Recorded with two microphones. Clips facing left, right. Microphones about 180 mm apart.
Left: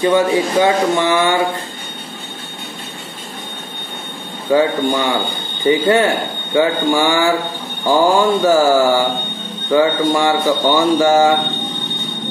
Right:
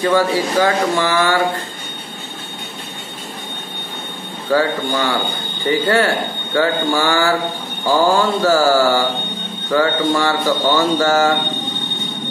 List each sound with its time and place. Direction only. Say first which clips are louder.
0.0 s speech: left 2 dB; 20° left (ahead or behind)
4.5 s speech: left 3 dB; 20° left (ahead or behind)